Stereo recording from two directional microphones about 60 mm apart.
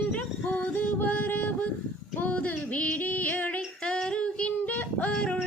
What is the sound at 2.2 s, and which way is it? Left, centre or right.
Female singing, left.